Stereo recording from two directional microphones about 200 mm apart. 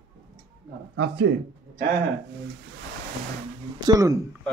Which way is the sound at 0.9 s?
60° right (ahead or behind).